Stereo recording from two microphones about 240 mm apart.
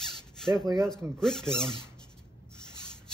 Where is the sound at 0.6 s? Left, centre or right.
Centre.